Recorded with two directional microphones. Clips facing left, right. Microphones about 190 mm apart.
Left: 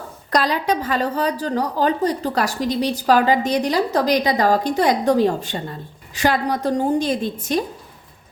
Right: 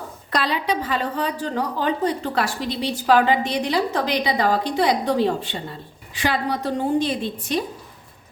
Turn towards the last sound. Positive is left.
turn(degrees=45)  # may be behind; listen again after turning